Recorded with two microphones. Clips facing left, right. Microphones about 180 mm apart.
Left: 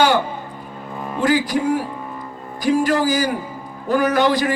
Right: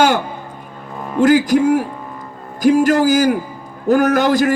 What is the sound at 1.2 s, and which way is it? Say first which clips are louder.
A man's voice: right 6 dB; 45° right (ahead or behind).